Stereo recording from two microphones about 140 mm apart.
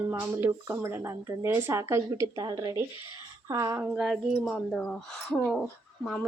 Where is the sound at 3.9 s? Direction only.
Centre (ahead or behind).